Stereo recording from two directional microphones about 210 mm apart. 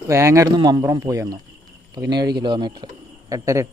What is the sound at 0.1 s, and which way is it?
Speech, 15° right (ahead or behind).